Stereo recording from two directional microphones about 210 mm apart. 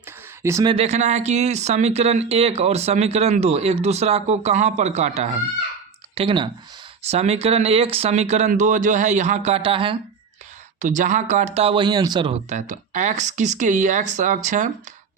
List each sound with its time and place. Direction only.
0.4 s speech: 15° right (ahead or behind)
10.8 s speech: 40° right (ahead or behind)